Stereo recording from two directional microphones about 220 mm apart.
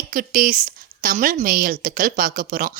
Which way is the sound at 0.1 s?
40° right (ahead or behind).